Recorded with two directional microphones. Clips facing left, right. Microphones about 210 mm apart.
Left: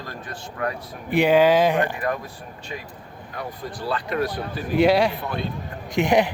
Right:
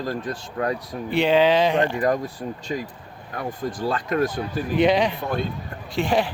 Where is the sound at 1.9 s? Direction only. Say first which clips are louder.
Right 5 dB; 35° right (ahead or behind).